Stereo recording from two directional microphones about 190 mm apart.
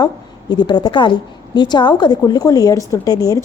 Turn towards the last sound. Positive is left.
turn(degrees=20)  # may be behind; listen again after turning